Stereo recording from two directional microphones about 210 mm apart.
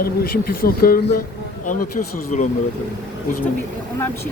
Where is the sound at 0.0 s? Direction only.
45° left (ahead or behind).